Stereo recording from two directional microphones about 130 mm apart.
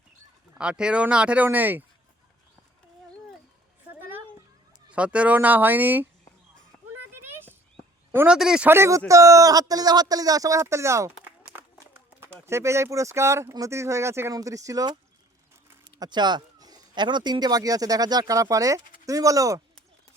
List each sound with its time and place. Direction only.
0.6 s speech: 5° right (ahead or behind)
4.9 s speech: 10° right (ahead or behind)
7.1 s a sound: 15° right (ahead or behind)
8.3 s speech: 5° right (ahead or behind)
8.7 s speech: 20° right (ahead or behind)